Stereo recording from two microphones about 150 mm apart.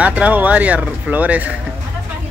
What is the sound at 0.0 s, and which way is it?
Speech, 10° right (ahead or behind).